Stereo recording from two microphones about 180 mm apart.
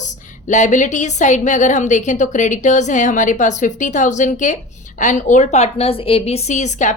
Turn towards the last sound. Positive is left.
turn(degrees=40)  # may be behind; listen again after turning